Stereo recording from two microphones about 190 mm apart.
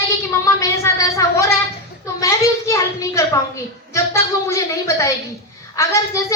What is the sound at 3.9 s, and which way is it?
A woman's voice, 15° left (ahead or behind).